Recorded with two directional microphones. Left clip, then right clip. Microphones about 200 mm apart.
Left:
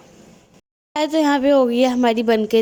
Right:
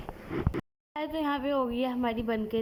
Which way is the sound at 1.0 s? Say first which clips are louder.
Left 14 dB; 45° left (ahead or behind).